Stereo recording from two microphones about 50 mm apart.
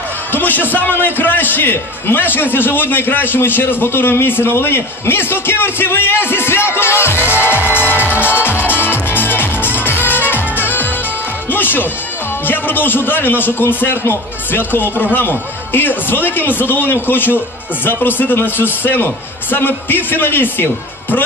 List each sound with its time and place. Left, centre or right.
0.3 s a man's voice: left
11.5 s music: left
12.4 s a man's voice: left